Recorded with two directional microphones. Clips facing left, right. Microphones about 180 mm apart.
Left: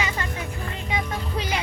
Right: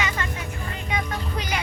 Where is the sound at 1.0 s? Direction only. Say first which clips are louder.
Left 1 dB; 5° left (ahead or behind).